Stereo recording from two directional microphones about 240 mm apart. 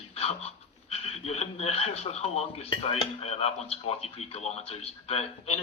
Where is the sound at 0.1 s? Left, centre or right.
Left.